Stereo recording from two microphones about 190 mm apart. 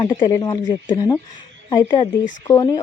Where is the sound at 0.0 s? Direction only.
20° left (ahead or behind).